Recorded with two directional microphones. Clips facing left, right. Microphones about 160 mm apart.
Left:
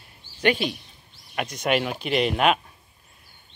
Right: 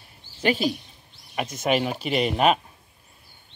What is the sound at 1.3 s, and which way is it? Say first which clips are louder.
Speech: even; 5° right (ahead or behind).